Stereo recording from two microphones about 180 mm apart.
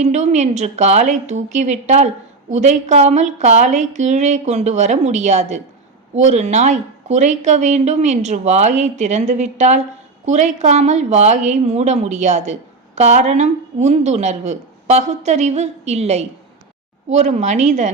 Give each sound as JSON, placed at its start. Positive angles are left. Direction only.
{"t": 0.0, "sound": "a woman's voice", "side_deg": -40}